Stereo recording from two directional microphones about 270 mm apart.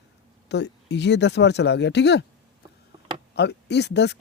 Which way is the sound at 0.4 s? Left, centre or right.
Left.